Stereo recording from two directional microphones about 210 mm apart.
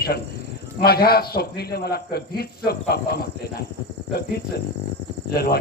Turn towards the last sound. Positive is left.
turn(degrees=50)  # may be behind; listen again after turning